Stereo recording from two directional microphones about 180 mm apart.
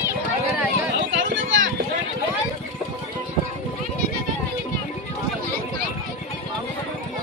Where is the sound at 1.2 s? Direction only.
90° right.